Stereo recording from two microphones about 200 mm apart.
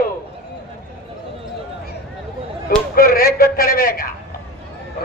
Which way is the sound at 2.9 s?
50° left (ahead or behind).